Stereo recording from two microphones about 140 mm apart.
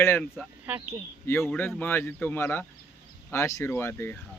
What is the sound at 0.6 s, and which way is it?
Speech, 15° right (ahead or behind).